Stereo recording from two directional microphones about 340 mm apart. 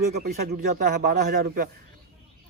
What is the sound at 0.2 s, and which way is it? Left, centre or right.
Speech, right.